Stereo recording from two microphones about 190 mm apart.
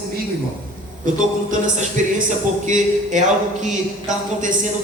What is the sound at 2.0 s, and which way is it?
Speech, 40° right (ahead or behind).